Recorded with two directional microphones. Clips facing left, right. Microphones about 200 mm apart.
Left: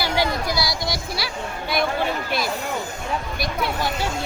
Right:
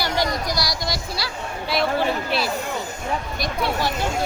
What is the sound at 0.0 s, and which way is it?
Speech, 5° left (ahead or behind).